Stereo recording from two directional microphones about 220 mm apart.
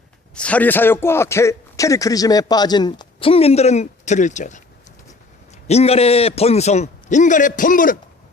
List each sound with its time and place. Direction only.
0.3 s a man's voice: 5° left (ahead or behind); by 4.6 s 35° left (ahead or behind)
5.6 s a man's voice: 30° left (ahead or behind)